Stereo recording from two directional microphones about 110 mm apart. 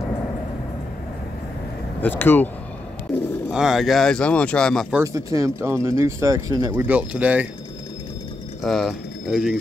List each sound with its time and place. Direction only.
2.0 s speech: 20° left (ahead or behind)
3.5 s speech: 5° right (ahead or behind)
5.0 s speech: 30° right (ahead or behind)
6.7 s speech: 15° right (ahead or behind)
8.6 s speech: centre (ahead or behind)